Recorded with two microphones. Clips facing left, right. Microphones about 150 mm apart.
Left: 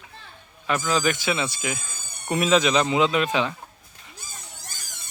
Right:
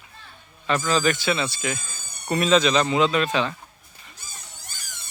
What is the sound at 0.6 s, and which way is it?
Speech, 10° left (ahead or behind).